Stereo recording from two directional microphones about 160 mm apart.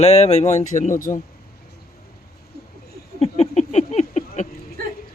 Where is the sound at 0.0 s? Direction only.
40° left (ahead or behind).